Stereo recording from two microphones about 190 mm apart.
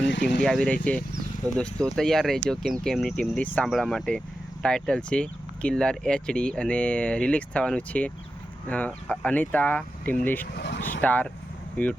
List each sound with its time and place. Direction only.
0.0 s speech: 65° left (ahead or behind)
0.4 s speech: 5° left (ahead or behind)
10.4 s speech: 60° left (ahead or behind)
11.0 s speech: 10° left (ahead or behind)